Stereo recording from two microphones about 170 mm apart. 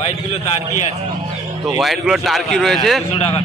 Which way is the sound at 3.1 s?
35° left (ahead or behind).